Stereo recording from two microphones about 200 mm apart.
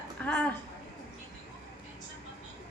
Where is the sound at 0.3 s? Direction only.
5° left (ahead or behind).